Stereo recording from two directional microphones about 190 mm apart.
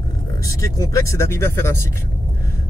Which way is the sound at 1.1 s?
15° left (ahead or behind).